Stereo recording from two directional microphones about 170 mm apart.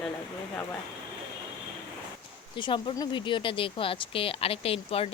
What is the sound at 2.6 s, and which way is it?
Speech, 30° left (ahead or behind).